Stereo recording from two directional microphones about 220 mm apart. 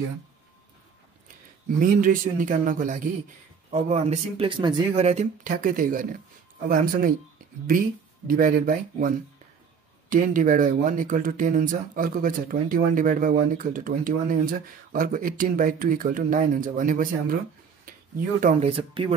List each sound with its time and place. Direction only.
1.8 s speech: 40° right (ahead or behind)
8.3 s speech: 40° right (ahead or behind)
17.9 s a sound: 40° right (ahead or behind)
18.4 s speech: 25° right (ahead or behind)